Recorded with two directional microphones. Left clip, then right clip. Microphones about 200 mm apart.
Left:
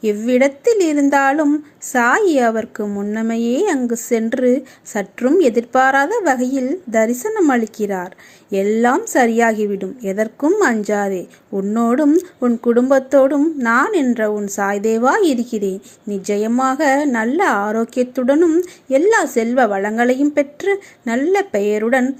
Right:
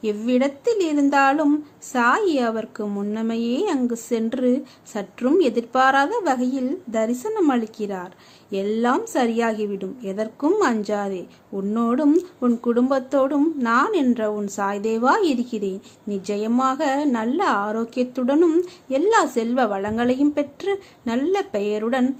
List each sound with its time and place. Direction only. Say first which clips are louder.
0.0 s a woman's voice: left 7 dB; 15° left (ahead or behind)
18.3 s speech: left 2 dB; 5° left (ahead or behind)
18.6 s a woman's voice: left 6 dB; 15° left (ahead or behind)